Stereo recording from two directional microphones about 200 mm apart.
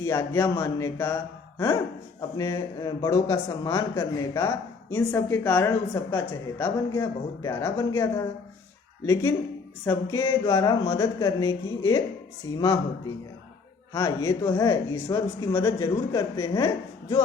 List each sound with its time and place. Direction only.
0.0 s a man's voice: 10° left (ahead or behind)
9.8 s a man's voice: 10° left (ahead or behind)
13.9 s a man's voice: 15° left (ahead or behind)